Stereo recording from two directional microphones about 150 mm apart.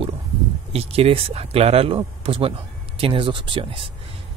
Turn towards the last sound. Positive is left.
turn(degrees=-35)  # may be behind; listen again after turning